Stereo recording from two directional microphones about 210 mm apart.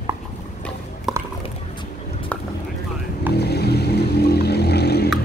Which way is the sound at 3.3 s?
50° left (ahead or behind).